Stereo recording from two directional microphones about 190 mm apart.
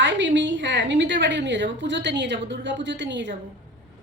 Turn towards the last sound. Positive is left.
turn(degrees=-70)  # may be behind; listen again after turning